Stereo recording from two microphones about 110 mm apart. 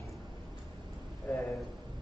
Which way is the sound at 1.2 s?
25° left (ahead or behind).